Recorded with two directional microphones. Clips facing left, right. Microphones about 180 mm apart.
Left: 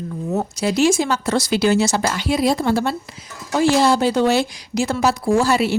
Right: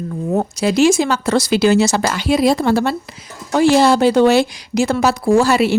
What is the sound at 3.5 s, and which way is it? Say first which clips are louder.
Speech: right 4 dB; 70° right (ahead or behind).